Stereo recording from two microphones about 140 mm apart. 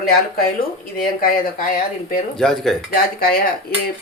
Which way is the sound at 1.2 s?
85° left.